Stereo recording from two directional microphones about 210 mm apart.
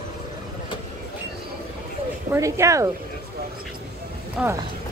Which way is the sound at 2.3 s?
15° right (ahead or behind).